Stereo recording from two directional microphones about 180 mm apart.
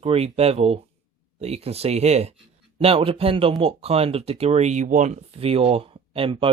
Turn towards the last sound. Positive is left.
turn(degrees=-30)  # may be behind; listen again after turning